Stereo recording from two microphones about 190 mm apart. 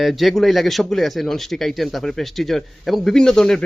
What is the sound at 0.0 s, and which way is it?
A man's voice, centre (ahead or behind).